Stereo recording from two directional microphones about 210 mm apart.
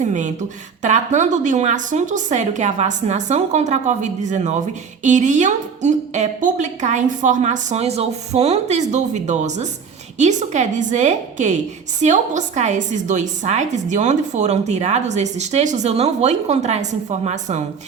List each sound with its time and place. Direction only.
0.0 s a woman's voice: 35° right (ahead or behind)